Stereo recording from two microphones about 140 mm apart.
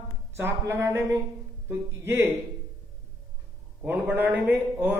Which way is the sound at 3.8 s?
15° right (ahead or behind).